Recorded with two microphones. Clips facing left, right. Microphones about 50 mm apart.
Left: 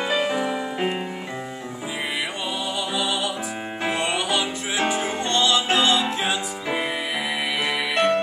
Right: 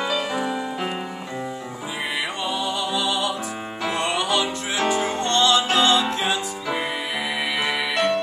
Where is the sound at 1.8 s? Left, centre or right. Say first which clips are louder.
Even; centre.